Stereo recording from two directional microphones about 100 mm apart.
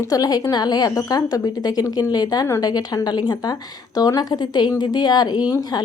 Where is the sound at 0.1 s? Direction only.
40° left (ahead or behind).